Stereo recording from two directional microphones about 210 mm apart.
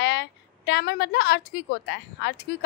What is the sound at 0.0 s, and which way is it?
A woman's voice, 55° left (ahead or behind).